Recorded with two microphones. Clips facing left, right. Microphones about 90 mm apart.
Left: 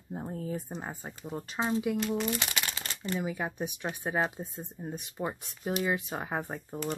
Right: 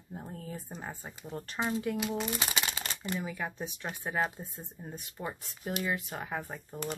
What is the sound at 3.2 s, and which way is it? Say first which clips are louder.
Speech: left 3 dB; 20° left (ahead or behind).